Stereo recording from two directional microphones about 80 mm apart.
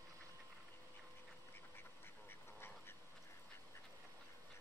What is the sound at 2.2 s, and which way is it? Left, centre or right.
Duck, left.